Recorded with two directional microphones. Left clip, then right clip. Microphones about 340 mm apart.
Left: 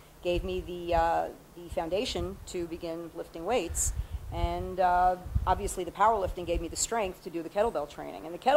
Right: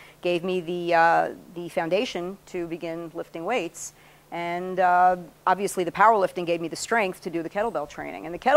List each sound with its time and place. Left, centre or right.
0.2 s speech: right
2.1 s a woman's voice: right